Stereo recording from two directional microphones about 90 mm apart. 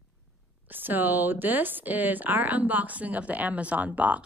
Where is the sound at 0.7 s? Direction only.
20° right (ahead or behind).